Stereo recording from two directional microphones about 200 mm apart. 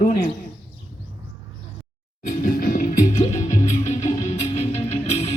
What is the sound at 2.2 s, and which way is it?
Music, 40° left (ahead or behind).